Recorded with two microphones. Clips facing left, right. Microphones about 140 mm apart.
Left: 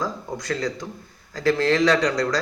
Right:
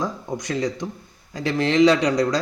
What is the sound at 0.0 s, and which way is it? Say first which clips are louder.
Speech: right 2 dB; 20° right (ahead or behind).